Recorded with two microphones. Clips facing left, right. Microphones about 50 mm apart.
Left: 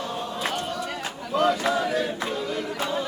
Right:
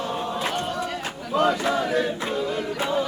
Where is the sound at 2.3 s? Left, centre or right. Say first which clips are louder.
Right 3 dB; centre.